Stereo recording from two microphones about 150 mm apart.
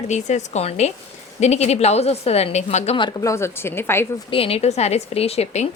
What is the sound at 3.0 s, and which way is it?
Speech, 30° left (ahead or behind).